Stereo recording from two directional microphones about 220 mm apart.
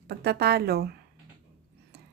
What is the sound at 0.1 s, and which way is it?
Speech, 45° right (ahead or behind).